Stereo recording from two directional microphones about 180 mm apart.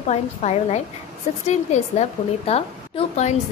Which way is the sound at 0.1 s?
35° left (ahead or behind).